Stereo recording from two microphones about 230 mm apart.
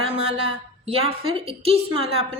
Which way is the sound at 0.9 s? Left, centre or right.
Right.